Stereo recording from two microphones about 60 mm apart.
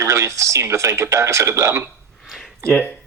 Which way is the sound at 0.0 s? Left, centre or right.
Right.